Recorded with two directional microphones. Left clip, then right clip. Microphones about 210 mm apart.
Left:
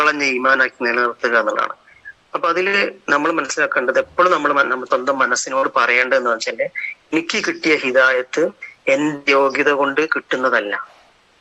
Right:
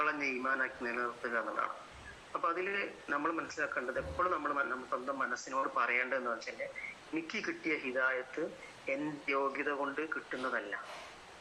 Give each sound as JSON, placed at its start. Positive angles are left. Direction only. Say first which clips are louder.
{"t": 0.0, "sound": "a man's voice", "louder": "left 18 dB", "side_deg": 50}